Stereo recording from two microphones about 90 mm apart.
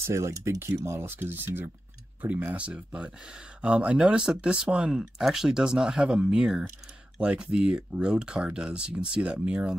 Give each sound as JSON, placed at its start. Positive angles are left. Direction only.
{"t": 0.0, "sound": "speech", "side_deg": -35}
{"t": 0.8, "sound": "speech", "side_deg": -25}